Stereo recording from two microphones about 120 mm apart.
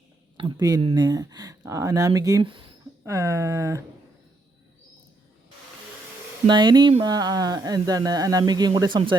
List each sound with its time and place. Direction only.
0.3 s speech: 40° right (ahead or behind)
2.4 s speech: 45° right (ahead or behind)
3.0 s speech: 25° right (ahead or behind)
6.5 s speech: 40° right (ahead or behind)